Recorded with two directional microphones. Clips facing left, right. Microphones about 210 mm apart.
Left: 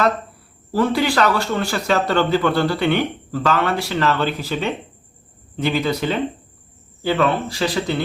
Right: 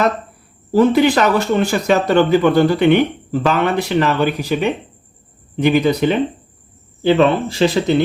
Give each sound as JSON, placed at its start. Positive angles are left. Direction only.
{"t": 0.7, "sound": "speech", "side_deg": -20}